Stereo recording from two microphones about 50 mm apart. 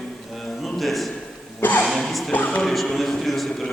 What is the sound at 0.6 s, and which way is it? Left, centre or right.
A man's voice, centre.